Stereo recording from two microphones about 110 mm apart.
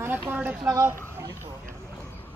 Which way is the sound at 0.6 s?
30° right (ahead or behind).